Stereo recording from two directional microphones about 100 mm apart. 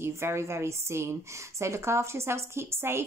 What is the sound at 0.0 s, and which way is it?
A woman's voice, 25° right (ahead or behind).